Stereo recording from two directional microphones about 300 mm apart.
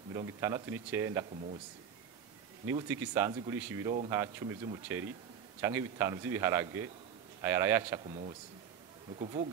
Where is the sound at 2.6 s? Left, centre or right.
Centre.